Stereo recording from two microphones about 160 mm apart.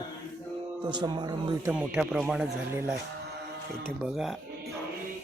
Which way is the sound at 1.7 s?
5° right (ahead or behind).